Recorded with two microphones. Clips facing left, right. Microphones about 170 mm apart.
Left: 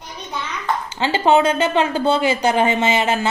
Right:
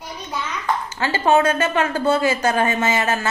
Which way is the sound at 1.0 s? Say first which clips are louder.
Left 2 dB; 25° left (ahead or behind).